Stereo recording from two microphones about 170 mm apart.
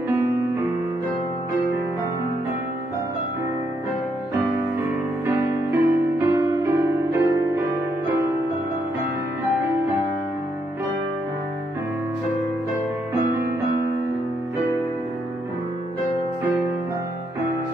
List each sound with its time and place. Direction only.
5.2 s music: 15° right (ahead or behind)